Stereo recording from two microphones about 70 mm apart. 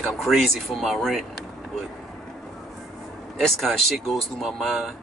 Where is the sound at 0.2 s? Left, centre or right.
Centre.